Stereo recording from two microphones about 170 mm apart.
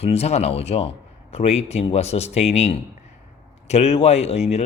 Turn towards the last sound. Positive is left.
turn(degrees=40)  # may be behind; listen again after turning